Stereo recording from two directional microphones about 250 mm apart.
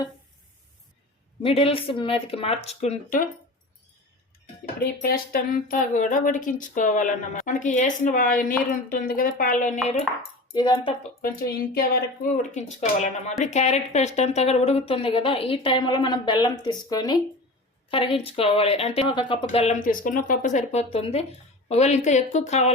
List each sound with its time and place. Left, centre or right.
1.4 s a woman's voice: left
5.0 s speech: left
10.5 s speech: centre
11.2 s a woman's voice: left
19.8 s a woman's voice: left